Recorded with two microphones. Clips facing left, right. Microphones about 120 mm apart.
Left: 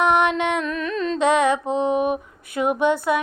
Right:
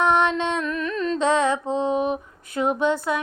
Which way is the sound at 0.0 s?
15° left (ahead or behind).